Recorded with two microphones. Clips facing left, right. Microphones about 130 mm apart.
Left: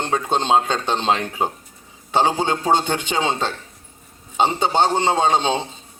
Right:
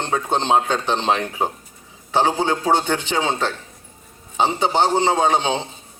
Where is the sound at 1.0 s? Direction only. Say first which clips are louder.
Even; 15° right (ahead or behind).